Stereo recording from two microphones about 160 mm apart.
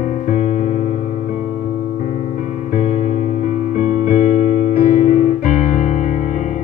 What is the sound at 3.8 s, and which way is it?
Keyboard, 50° left (ahead or behind).